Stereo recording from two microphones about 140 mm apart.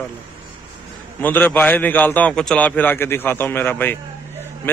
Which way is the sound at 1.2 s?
15° left (ahead or behind).